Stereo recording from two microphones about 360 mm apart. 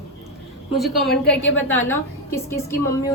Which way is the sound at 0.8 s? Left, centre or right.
Centre.